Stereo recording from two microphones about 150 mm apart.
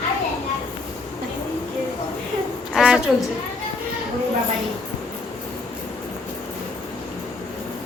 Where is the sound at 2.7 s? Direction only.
5° right (ahead or behind).